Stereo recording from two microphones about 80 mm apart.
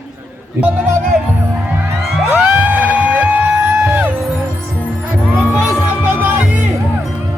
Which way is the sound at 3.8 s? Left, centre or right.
Right.